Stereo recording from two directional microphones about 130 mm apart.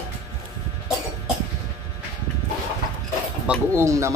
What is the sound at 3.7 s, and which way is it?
Speech, 20° right (ahead or behind).